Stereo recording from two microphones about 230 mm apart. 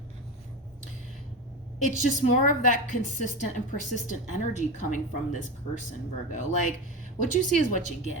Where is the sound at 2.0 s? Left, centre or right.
Left.